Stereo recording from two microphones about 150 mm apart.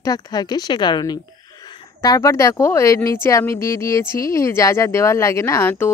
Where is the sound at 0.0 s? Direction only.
25° left (ahead or behind).